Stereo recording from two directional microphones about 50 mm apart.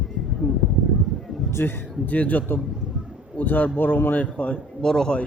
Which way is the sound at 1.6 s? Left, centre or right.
Left.